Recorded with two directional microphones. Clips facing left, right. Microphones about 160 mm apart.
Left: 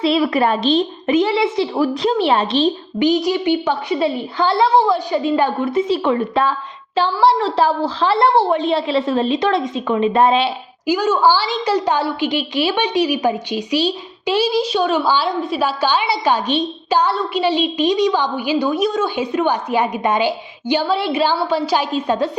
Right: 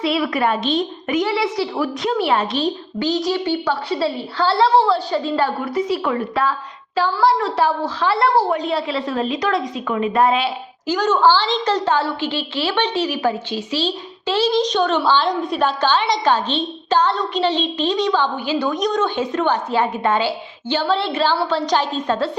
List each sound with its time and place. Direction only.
0.0 s a woman's voice: 30° left (ahead or behind)
10.8 s a woman's voice: 10° left (ahead or behind)